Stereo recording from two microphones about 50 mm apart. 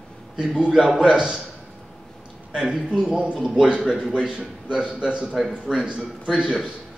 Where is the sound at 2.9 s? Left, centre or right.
Centre.